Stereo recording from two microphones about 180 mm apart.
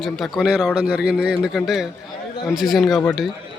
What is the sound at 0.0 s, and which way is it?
A man's voice, centre (ahead or behind).